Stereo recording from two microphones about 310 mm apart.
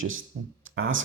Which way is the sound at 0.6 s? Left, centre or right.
Right.